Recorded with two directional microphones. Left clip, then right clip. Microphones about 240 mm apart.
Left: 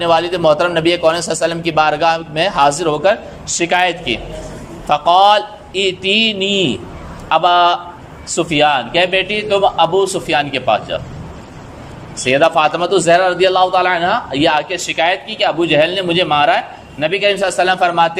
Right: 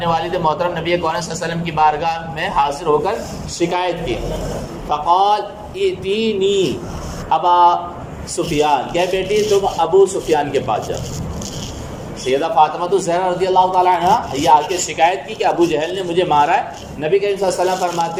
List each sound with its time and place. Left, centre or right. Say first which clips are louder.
0.0 s a man's voice: left 4 dB; left
12.2 s a man's voice: left 3 dB; left